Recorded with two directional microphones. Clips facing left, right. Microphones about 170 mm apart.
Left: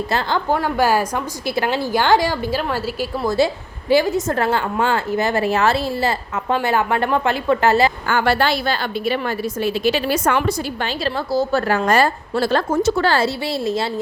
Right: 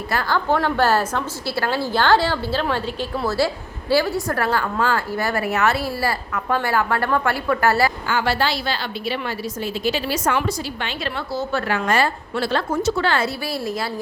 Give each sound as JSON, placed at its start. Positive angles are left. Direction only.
{"t": 0.1, "sound": "a woman's voice", "side_deg": 25}
{"t": 0.5, "sound": "a woman's voice", "side_deg": 10}
{"t": 8.0, "sound": "a woman's voice", "side_deg": 55}
{"t": 10.8, "sound": "a woman's voice", "side_deg": 35}